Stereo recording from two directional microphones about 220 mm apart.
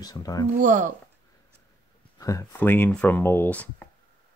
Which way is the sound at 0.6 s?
35° right (ahead or behind).